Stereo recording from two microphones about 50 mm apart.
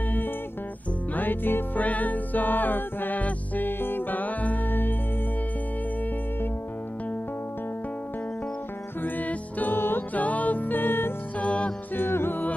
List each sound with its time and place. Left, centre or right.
1.1 s music: left
9.0 s music: left
9.8 s music: left
10.1 s music: left
11.3 s music: left
11.9 s music: left